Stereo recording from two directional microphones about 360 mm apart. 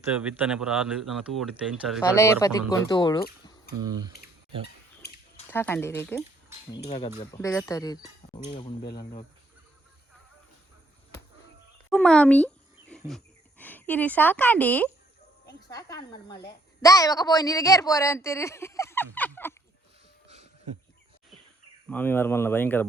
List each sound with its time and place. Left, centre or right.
0.1 s speech: centre
3.8 s speech: centre
5.0 s a sound: left
5.5 s speech: centre
6.8 s speech: centre
11.9 s speech: centre
12.9 s a sound: centre
15.7 s speech: centre
20.2 s a sound: centre
21.8 s speech: centre